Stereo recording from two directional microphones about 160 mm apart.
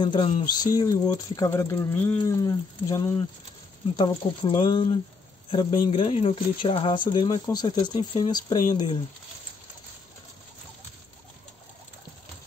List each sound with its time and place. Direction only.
0.0 s speech: 30° left (ahead or behind)